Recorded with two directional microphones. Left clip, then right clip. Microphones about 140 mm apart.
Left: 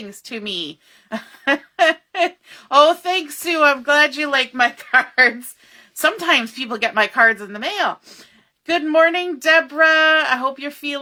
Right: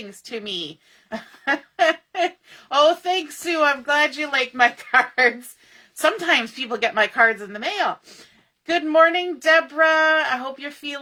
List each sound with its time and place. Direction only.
0.3 s a woman's voice: 50° left (ahead or behind)